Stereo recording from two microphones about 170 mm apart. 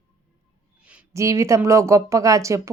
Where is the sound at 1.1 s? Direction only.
15° right (ahead or behind).